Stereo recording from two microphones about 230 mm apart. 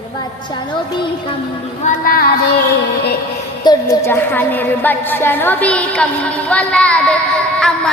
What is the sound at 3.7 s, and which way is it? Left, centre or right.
A woman's voice, centre.